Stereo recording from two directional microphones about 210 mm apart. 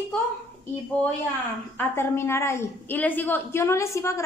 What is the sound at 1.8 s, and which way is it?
A woman's voice, 10° left (ahead or behind).